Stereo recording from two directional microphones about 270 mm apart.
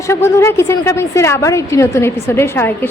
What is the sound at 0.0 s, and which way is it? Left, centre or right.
A woman's voice, centre.